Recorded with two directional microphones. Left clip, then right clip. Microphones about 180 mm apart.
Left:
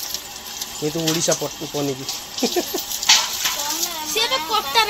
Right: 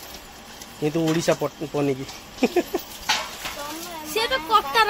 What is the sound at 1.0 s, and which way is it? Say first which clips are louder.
Speech: left 1 dB; 10° right (ahead or behind).